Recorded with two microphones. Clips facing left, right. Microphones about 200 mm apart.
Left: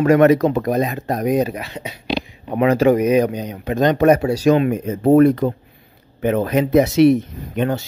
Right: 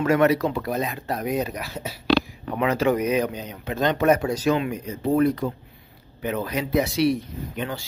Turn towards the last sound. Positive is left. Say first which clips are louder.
# left 9 dB
turn(degrees=50)  # may be behind; listen again after turning